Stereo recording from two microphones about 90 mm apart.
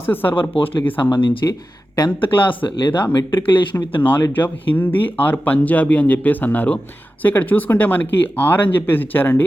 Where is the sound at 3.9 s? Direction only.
20° left (ahead or behind).